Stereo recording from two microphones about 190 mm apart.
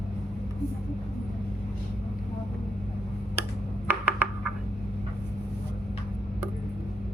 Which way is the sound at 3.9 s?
10° right (ahead or behind).